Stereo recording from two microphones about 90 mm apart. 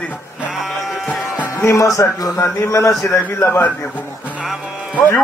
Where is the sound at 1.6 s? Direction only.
35° left (ahead or behind).